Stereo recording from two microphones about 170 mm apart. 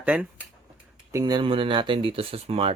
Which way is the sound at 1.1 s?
25° right (ahead or behind).